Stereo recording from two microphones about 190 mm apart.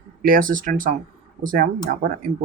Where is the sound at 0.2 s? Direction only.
50° right (ahead or behind).